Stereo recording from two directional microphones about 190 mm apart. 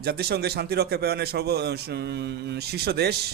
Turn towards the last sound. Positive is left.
turn(degrees=-60)  # may be behind; listen again after turning